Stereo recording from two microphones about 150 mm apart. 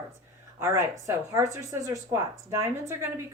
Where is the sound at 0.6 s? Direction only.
20° right (ahead or behind).